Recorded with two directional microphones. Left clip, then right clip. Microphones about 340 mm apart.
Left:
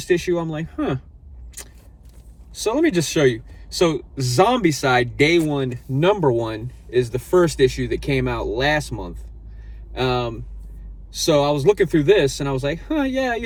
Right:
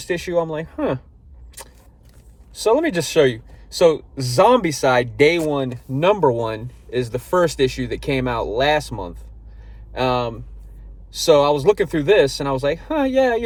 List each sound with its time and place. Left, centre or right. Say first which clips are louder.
0.0 s speech: even; centre
2.5 s speech: right 2 dB; centre